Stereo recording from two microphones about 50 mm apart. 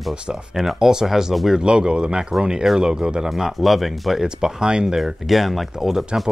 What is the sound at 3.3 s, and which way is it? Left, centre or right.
Speech, centre.